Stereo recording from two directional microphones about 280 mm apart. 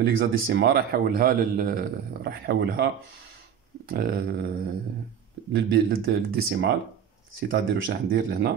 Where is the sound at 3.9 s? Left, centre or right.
Right.